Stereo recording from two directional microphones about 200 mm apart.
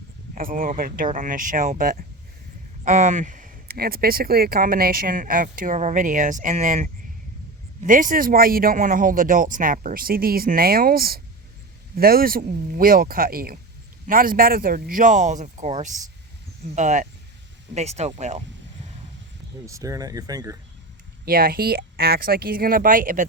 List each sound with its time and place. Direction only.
0.3 s speech: 45° right (ahead or behind)
19.6 s speech: 15° right (ahead or behind)
21.2 s speech: 45° right (ahead or behind)